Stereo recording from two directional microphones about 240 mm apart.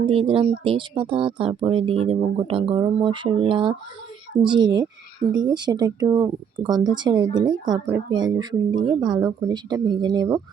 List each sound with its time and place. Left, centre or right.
0.0 s speech: right